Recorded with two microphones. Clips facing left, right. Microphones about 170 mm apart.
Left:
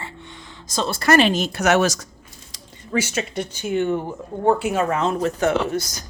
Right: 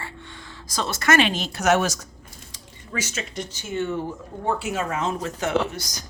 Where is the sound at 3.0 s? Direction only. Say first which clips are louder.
Left 6 dB; 60° left (ahead or behind).